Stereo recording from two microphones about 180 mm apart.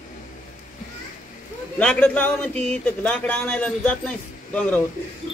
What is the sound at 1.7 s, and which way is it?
A man's voice, 5° left (ahead or behind).